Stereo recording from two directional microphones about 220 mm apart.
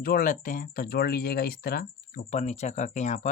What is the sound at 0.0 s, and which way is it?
Speech, 40° left (ahead or behind).